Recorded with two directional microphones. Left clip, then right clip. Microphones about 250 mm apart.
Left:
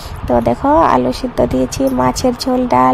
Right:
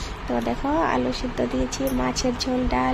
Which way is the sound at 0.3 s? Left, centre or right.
Left.